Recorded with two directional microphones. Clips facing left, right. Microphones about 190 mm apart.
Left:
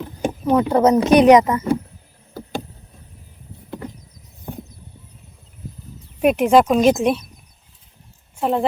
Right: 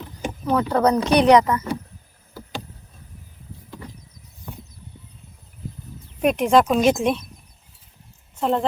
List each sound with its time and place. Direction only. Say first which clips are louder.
0.4 s speech: left 4 dB; 20° left (ahead or behind)
6.2 s speech: left 3 dB; 5° left (ahead or behind)
8.4 s speech: left 1 dB; 10° left (ahead or behind)